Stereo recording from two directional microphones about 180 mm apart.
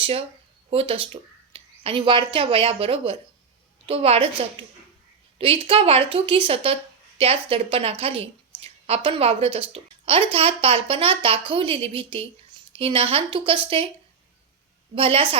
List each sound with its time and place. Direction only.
0.0 s a woman's voice: 30° right (ahead or behind)
14.9 s a woman's voice: 30° right (ahead or behind)